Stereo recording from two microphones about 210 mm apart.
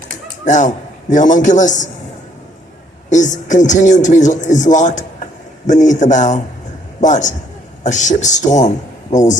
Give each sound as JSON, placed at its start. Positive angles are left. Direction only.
{"t": 0.4, "sound": "a man's voice", "side_deg": 35}
{"t": 3.1, "sound": "a man's voice", "side_deg": 35}